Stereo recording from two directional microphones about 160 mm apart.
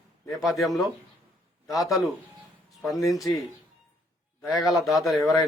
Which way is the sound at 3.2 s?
20° left (ahead or behind).